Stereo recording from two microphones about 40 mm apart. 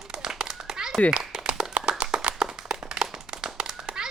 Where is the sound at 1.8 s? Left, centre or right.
Centre.